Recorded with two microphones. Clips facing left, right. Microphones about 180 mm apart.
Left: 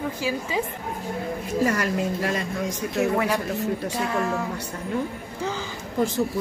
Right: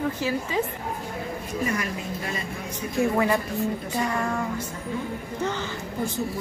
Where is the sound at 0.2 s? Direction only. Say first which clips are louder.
Even; 10° left (ahead or behind).